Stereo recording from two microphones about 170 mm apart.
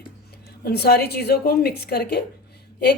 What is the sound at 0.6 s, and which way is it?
A woman's voice, 70° left (ahead or behind).